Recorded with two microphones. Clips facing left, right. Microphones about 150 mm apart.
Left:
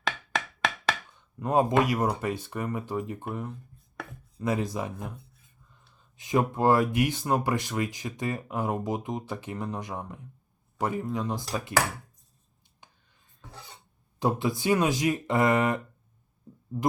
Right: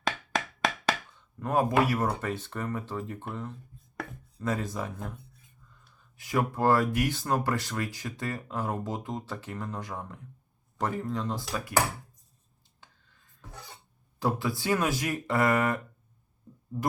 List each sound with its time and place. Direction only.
0.3 s a sound: centre (ahead or behind)
1.4 s speech: 20° left (ahead or behind)
3.9 s chopping: centre (ahead or behind)
4.4 s speech: 15° left (ahead or behind)
12.8 s music: 20° left (ahead or behind)
13.4 s cough: centre (ahead or behind)
14.2 s speech: 20° left (ahead or behind)